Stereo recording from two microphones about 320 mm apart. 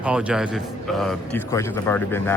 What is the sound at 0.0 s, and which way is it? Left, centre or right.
A man's voice, centre.